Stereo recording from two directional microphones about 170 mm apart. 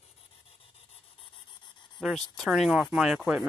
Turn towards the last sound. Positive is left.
turn(degrees=-5)  # may be behind; listen again after turning